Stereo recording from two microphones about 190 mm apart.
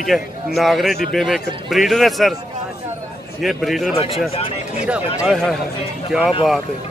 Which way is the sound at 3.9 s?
30° left (ahead or behind).